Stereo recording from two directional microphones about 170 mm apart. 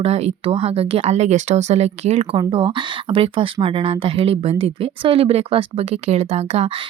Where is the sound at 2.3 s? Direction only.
30° right (ahead or behind).